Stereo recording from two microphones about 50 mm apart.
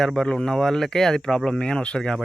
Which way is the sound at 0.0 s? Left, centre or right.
Centre.